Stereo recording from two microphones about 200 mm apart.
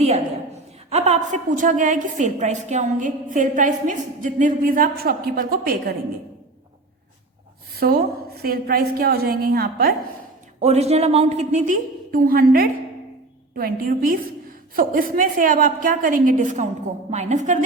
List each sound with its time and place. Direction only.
0.9 s a woman's voice: 35° right (ahead or behind); by 6.0 s 50° right (ahead or behind)
7.8 s a woman's voice: 50° right (ahead or behind)
10.6 s a woman's voice: 30° right (ahead or behind)